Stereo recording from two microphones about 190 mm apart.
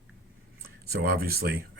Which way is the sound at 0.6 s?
55° right (ahead or behind).